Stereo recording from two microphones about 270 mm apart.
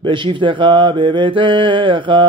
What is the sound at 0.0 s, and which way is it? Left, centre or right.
Mantra, centre.